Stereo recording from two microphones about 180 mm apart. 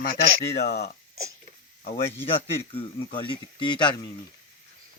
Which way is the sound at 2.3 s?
30° left (ahead or behind).